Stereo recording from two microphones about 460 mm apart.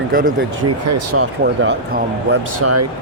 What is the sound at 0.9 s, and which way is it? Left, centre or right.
Speech, right.